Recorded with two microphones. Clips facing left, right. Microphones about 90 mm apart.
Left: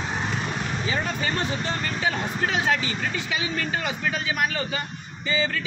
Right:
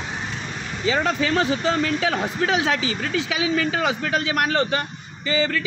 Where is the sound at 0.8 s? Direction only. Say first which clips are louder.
Right 9 dB; 90° right.